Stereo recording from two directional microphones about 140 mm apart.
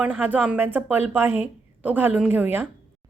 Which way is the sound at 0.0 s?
10° right (ahead or behind).